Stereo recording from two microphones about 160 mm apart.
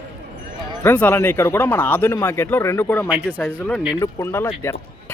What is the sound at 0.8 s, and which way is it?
Speech, 10° left (ahead or behind).